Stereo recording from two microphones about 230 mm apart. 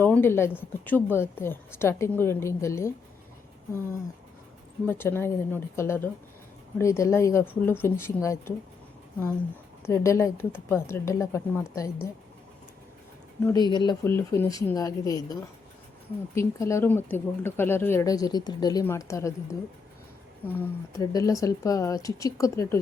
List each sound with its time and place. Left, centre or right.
0.0 s speech: centre
4.9 s speech: centre
9.8 s speech: centre
13.4 s speech: centre